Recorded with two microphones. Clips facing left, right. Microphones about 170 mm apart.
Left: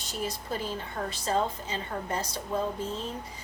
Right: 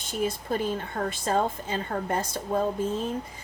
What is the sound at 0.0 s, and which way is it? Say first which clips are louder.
Speech: right 6 dB; 55° right (ahead or behind).